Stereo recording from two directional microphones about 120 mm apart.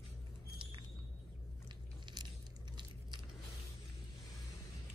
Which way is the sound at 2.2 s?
35° right (ahead or behind).